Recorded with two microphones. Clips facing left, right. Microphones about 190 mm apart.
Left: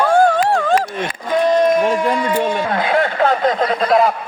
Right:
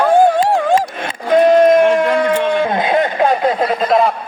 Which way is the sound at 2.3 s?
45° left (ahead or behind).